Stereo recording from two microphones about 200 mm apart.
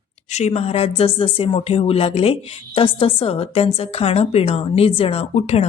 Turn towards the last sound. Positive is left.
turn(degrees=30)  # may be behind; listen again after turning